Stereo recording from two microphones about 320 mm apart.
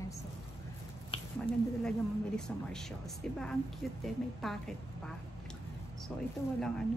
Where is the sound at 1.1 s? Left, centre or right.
Centre.